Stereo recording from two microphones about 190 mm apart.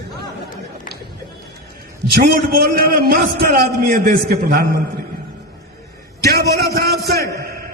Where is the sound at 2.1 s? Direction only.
55° right (ahead or behind).